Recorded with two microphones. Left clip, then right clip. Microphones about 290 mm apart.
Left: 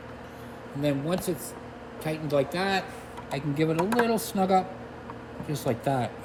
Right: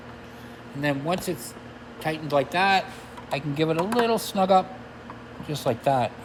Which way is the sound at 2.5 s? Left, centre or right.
Centre.